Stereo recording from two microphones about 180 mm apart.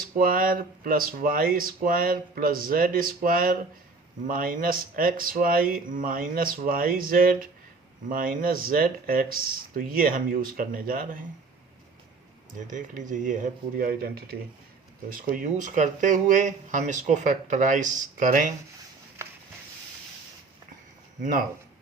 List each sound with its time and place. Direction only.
0.2 s speech: 55° right (ahead or behind)
12.7 s speech: 45° right (ahead or behind)